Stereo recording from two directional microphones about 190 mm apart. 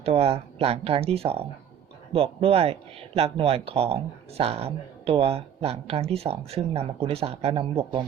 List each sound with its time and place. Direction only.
0.0 s speech: 30° right (ahead or behind)